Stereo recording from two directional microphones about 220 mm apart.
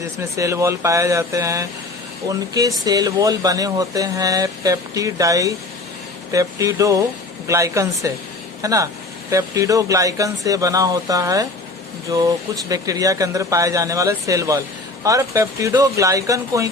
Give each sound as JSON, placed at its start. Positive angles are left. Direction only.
{"t": 0.2, "sound": "speech", "side_deg": -15}
{"t": 12.6, "sound": "speech", "side_deg": -15}